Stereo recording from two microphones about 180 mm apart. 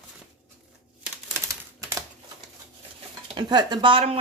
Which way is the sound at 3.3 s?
25° right (ahead or behind).